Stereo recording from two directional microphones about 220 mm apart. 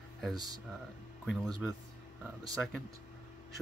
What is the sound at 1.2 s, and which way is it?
Speech, centre (ahead or behind).